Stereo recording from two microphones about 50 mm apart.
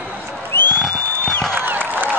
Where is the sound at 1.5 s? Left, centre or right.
Right.